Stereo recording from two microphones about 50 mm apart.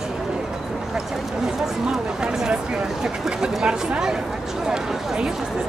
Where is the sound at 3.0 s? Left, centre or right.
Centre.